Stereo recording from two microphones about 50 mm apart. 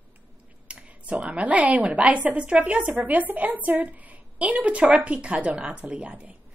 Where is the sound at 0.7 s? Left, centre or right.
Right.